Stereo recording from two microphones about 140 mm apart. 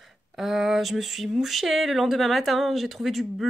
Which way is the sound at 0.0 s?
Centre (ahead or behind).